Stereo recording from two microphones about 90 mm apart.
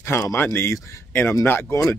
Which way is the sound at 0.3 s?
25° left (ahead or behind).